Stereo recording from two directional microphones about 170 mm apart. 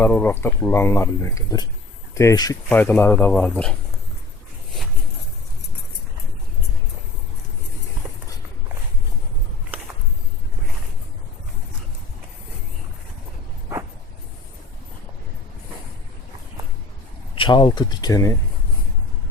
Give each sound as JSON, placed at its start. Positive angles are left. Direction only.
{"t": 0.0, "sound": "speech", "side_deg": 10}
{"t": 2.6, "sound": "speech", "side_deg": 10}
{"t": 17.3, "sound": "speech", "side_deg": 30}